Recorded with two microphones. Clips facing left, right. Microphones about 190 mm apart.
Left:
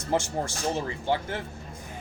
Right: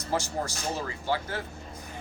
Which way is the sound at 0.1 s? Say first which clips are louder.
Left 3 dB; 25° left (ahead or behind).